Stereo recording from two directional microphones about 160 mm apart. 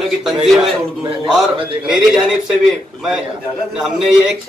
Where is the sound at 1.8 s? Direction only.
5° right (ahead or behind).